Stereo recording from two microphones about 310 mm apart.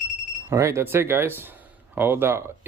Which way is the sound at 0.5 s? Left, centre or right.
Centre.